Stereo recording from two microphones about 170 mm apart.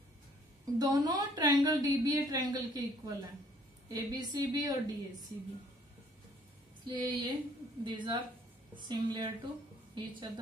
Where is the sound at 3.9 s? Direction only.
20° right (ahead or behind).